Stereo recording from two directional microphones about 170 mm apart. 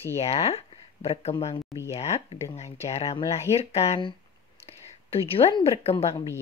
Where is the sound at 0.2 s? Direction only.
35° left (ahead or behind).